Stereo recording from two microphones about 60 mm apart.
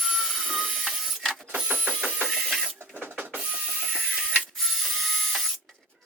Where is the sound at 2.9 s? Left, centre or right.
Right.